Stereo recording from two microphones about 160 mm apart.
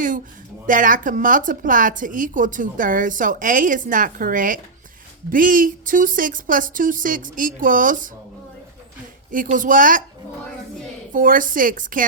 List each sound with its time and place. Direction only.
0.7 s a woman's voice: 55° right (ahead or behind)
9.3 s a woman's voice: 55° right (ahead or behind)
11.1 s a woman's voice: 60° right (ahead or behind)